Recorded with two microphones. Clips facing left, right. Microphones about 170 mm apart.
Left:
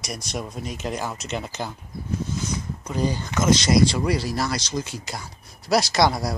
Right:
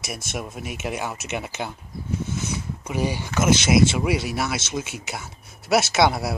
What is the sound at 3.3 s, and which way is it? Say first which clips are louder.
Speech: right 1 dB; 5° right (ahead or behind).